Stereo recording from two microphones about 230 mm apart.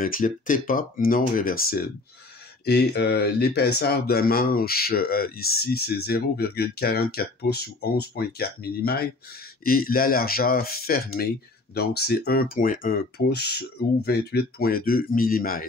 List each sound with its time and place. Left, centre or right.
0.0 s speech: left